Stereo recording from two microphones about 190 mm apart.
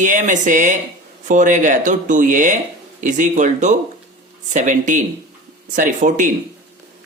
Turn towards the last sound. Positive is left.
turn(degrees=-40)  # may be behind; listen again after turning